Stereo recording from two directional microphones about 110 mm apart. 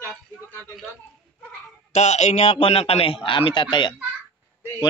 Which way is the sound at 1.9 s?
90° left.